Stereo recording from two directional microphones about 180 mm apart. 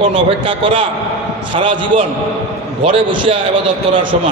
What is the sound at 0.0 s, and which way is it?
A man's voice, 30° right (ahead or behind).